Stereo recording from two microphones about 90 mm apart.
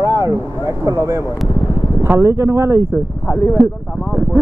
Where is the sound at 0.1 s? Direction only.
35° right (ahead or behind).